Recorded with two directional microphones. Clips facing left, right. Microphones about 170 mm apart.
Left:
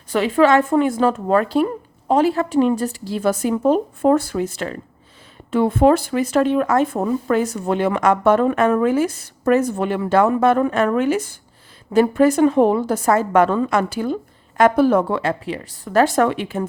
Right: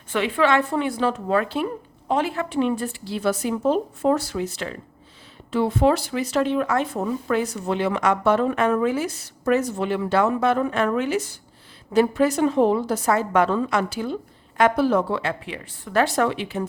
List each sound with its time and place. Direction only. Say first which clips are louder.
0.1 s speech: left 5 dB; 40° left (ahead or behind)